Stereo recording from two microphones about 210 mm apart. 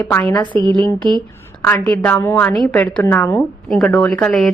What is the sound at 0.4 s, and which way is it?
Speech, 20° right (ahead or behind).